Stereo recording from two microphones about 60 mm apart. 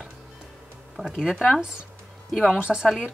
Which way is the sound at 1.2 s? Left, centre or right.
Centre.